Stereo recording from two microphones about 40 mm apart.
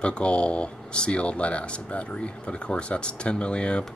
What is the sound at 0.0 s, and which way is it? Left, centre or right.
Speech, left.